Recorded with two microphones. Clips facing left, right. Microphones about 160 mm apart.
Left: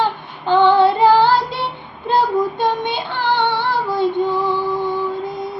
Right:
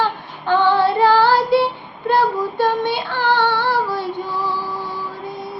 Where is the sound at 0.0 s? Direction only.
15° left (ahead or behind).